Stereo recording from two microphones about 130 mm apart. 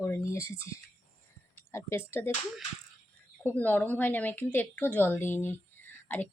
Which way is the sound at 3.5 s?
15° left (ahead or behind).